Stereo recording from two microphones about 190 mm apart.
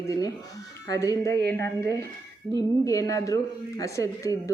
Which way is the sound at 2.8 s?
15° left (ahead or behind).